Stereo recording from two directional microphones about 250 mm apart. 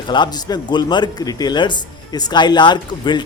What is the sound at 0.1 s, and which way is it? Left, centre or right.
A man's voice, centre.